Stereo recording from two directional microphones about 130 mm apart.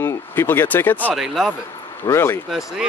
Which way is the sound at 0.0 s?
20° left (ahead or behind).